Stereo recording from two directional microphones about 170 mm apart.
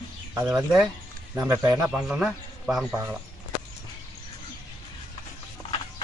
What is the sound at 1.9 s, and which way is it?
Speech, 5° right (ahead or behind).